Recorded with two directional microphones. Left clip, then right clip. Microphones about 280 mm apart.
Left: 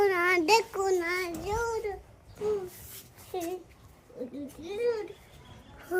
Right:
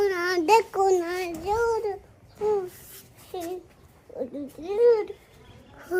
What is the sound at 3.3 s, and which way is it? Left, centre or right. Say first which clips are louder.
Dog: right 1 dB; centre.